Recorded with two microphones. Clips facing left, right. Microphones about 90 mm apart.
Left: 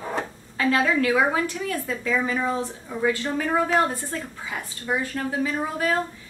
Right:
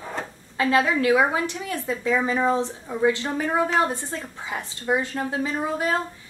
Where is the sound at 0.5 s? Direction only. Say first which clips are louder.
Right 1 dB; 20° right (ahead or behind).